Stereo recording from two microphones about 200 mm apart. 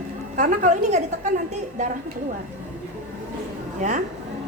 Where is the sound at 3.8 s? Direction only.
40° right (ahead or behind).